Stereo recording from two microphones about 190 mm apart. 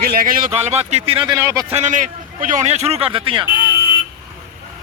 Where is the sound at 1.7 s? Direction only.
40° right (ahead or behind).